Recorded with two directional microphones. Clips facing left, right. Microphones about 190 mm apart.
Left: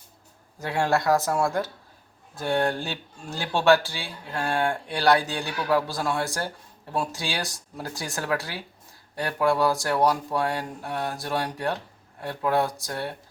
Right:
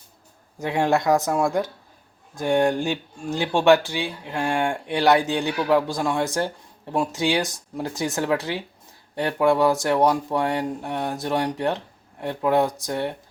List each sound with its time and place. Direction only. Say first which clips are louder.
0.6 s speech: right 3 dB; 20° right (ahead or behind)